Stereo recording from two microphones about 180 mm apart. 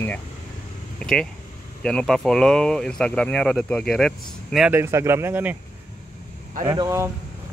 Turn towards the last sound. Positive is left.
turn(degrees=-15)  # may be behind; listen again after turning